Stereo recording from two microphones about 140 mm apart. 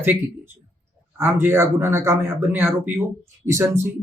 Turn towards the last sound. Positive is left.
turn(degrees=-15)  # may be behind; listen again after turning